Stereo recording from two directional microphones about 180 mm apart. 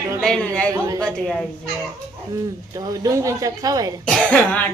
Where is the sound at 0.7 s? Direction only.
20° right (ahead or behind).